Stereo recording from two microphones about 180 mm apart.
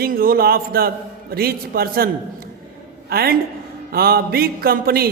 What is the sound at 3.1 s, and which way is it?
A man's voice, 60° right (ahead or behind).